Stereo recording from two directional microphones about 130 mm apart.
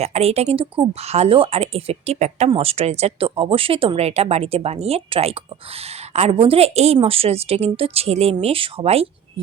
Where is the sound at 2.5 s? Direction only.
50° right (ahead or behind).